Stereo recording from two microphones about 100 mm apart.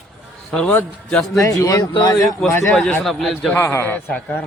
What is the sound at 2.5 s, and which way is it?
Speech, 25° left (ahead or behind).